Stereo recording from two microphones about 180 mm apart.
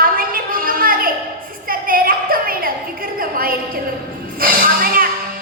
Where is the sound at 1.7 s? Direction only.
50° right (ahead or behind).